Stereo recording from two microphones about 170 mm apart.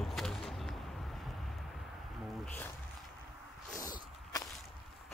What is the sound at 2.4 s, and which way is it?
Speech, 10° left (ahead or behind).